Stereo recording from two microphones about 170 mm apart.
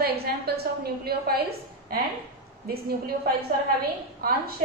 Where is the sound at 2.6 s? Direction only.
65° right (ahead or behind).